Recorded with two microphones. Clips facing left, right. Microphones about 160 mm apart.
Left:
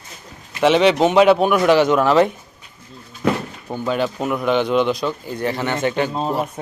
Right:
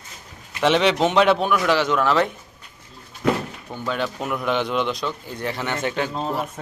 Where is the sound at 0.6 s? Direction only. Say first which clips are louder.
Left 4 dB; centre (ahead or behind).